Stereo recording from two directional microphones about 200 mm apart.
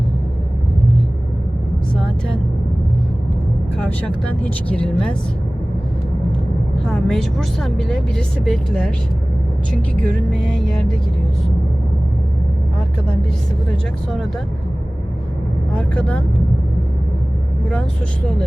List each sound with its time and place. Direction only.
3.8 s a woman's voice: 5° left (ahead or behind)
6.8 s a woman's voice: 5° left (ahead or behind)
10.3 s a woman's voice: centre (ahead or behind)
15.7 s a woman's voice: 5° left (ahead or behind)
17.7 s a woman's voice: 5° left (ahead or behind)